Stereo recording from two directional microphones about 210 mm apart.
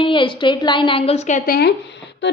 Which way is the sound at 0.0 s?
25° left (ahead or behind).